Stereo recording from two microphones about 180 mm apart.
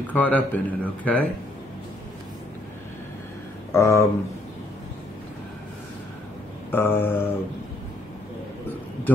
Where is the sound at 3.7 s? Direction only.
15° left (ahead or behind).